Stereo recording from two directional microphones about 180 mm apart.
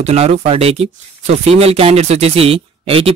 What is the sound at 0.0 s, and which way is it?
Speech, 35° right (ahead or behind).